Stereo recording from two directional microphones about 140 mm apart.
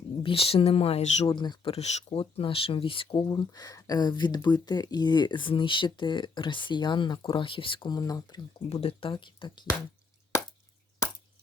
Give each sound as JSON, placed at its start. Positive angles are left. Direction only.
{"t": 0.2, "sound": "speech", "side_deg": 40}
{"t": 1.3, "sound": "speech", "side_deg": 35}
{"t": 1.7, "sound": "speech", "side_deg": 50}
{"t": 8.7, "sound": "speech", "side_deg": 45}